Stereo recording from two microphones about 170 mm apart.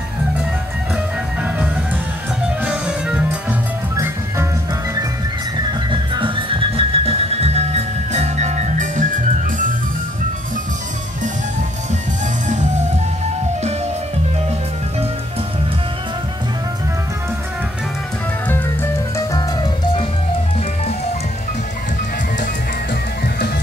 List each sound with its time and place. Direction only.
2.6 s music: 5° right (ahead or behind)
5.9 s music: 30° right (ahead or behind); by 9.1 s 50° right (ahead or behind)
18.5 s music: 10° left (ahead or behind)